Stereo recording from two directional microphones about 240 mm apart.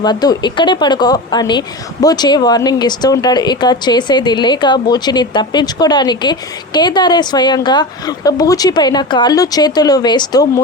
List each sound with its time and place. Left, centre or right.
0.0 s speech: centre